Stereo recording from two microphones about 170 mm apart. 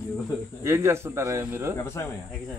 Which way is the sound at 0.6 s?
15° right (ahead or behind).